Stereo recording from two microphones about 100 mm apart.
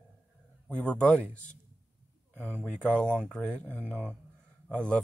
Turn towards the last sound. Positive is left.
turn(degrees=10)  # may be behind; listen again after turning